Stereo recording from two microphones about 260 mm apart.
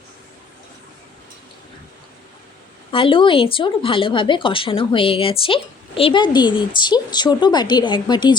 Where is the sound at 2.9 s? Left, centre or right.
Centre.